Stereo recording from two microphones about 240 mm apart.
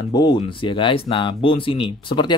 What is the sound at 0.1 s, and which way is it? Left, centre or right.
Speech, centre.